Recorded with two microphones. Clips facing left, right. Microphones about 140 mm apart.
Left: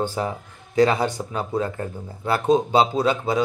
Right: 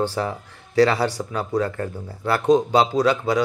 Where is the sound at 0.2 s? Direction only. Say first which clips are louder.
Right 1 dB; 25° left (ahead or behind).